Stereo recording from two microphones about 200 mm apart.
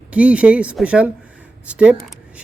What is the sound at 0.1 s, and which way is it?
Speech, 5° right (ahead or behind).